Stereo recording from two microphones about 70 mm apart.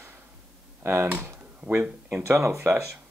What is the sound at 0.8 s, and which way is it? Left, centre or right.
Speech, right.